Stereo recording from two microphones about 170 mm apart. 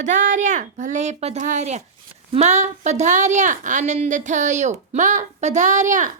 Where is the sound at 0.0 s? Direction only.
50° right (ahead or behind).